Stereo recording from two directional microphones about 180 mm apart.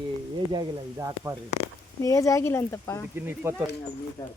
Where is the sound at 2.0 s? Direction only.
15° left (ahead or behind).